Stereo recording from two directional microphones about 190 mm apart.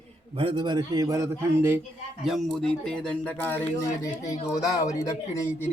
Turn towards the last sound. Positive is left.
turn(degrees=15)  # may be behind; listen again after turning